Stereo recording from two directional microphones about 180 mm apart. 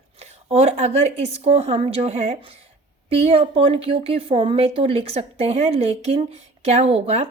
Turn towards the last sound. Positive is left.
turn(degrees=-35)  # may be behind; listen again after turning